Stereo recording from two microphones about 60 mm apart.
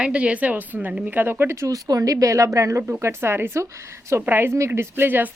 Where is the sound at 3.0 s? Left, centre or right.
Right.